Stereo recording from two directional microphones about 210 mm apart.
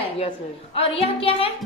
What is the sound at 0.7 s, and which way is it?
Speech, 25° left (ahead or behind).